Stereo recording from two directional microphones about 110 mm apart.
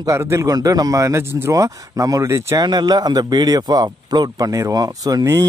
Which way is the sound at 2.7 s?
40° right (ahead or behind).